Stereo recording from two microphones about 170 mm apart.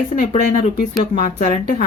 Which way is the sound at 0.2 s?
60° left (ahead or behind).